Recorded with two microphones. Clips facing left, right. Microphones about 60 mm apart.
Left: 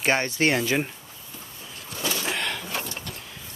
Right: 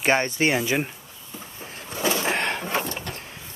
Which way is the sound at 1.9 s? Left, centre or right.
Right.